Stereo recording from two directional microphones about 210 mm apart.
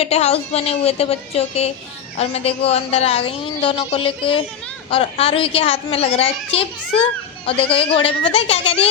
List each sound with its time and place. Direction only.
0.0 s a woman's voice: 30° left (ahead or behind)